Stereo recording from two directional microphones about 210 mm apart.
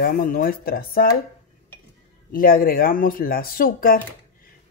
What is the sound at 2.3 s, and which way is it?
Speech, 45° left (ahead or behind).